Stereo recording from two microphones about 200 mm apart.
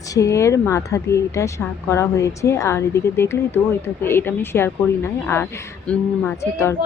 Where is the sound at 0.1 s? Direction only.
15° left (ahead or behind).